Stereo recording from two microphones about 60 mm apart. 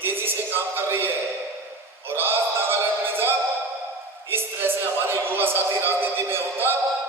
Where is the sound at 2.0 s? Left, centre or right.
Right.